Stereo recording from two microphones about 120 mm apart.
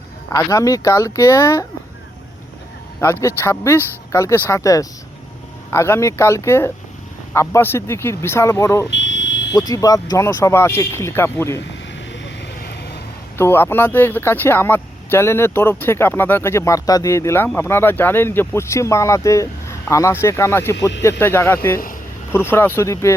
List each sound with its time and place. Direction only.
0.3 s speech: 25° left (ahead or behind)
3.0 s speech: 25° left (ahead or behind)
13.3 s speech: 20° left (ahead or behind)